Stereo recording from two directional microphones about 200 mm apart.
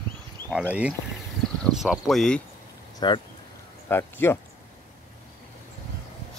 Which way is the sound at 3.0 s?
20° left (ahead or behind).